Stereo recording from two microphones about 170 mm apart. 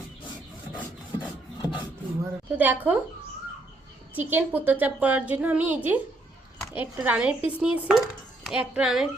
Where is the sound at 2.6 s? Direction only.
10° right (ahead or behind).